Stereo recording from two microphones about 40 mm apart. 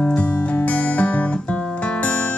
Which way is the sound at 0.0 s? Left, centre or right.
Left.